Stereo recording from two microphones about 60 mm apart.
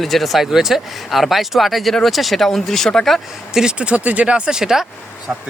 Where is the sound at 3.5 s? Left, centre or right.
Centre.